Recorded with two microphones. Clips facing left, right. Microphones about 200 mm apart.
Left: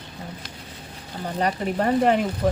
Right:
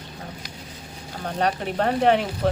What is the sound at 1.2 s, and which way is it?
Speech, 5° left (ahead or behind).